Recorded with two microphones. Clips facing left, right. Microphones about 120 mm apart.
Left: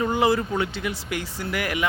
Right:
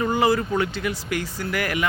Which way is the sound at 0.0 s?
20° left (ahead or behind).